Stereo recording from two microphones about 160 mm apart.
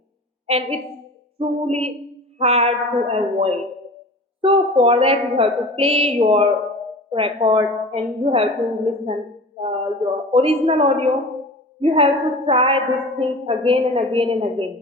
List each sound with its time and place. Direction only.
0.4 s a woman's voice: 40° right (ahead or behind)